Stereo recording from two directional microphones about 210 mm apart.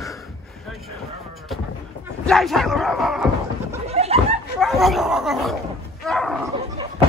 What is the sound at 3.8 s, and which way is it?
Chuckle, 30° right (ahead or behind).